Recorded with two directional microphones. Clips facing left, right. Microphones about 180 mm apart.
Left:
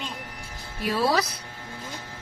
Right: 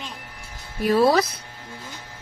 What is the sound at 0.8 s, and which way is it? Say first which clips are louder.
Speech: right 6 dB; 45° right (ahead or behind).